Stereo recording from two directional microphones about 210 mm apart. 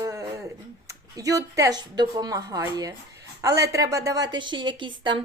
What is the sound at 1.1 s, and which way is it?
Speech, 15° right (ahead or behind).